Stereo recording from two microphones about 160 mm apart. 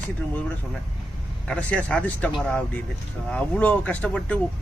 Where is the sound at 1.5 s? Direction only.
10° left (ahead or behind).